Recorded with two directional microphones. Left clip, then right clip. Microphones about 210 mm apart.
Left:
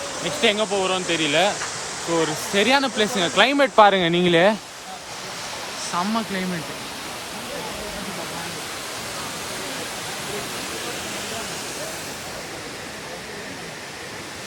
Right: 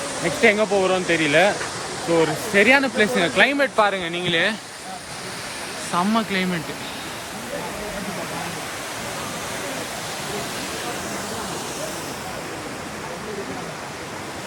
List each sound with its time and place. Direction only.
0.4 s speech: 15° left (ahead or behind); by 4.5 s 35° left (ahead or behind)
5.9 s speech: 5° left (ahead or behind)